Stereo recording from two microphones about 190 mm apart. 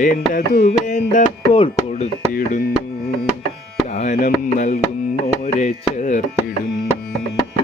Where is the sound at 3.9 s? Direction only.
40° left (ahead or behind).